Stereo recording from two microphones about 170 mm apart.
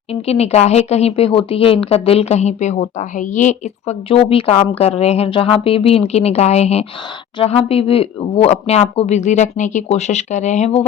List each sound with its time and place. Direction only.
0.1 s speech: 35° left (ahead or behind)